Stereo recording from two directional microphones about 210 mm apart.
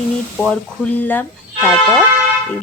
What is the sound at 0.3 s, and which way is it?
Speech, 5° left (ahead or behind).